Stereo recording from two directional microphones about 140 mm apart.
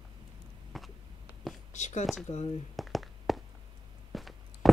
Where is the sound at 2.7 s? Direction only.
Centre (ahead or behind).